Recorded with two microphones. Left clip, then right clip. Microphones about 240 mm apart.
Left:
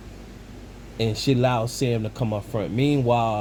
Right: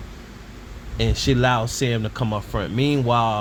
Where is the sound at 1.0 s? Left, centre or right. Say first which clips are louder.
Right 1 dB; right.